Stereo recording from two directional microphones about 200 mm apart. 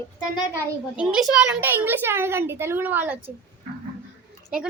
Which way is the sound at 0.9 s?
5° right (ahead or behind).